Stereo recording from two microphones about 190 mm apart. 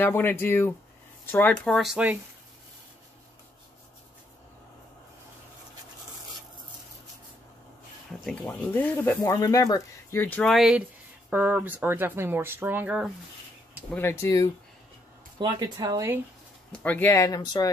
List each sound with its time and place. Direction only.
0.0 s speech: 10° left (ahead or behind); by 2.1 s 5° right (ahead or behind)
8.1 s a sound: centre (ahead or behind)
8.5 s speech: 10° left (ahead or behind); by 13.1 s 5° right (ahead or behind)
13.9 s speech: 15° left (ahead or behind)
15.3 s speech: 25° right (ahead or behind)
16.8 s speech: 10° left (ahead or behind)